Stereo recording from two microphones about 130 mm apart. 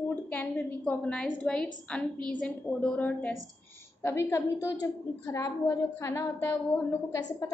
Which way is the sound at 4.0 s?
20° left (ahead or behind).